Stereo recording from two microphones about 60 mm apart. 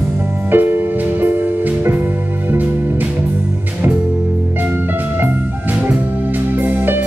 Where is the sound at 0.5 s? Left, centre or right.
Right.